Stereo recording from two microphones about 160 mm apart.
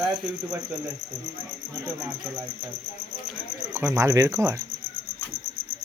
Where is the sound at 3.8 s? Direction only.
15° right (ahead or behind).